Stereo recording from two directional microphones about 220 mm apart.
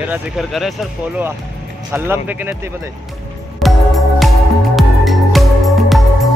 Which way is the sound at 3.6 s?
Centre (ahead or behind).